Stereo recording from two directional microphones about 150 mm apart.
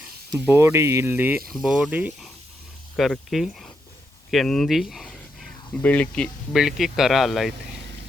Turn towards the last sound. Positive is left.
turn(degrees=0)  # may be behind; listen again after turning